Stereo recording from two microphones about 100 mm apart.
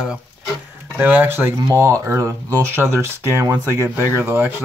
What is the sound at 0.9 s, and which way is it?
Speech, 15° right (ahead or behind).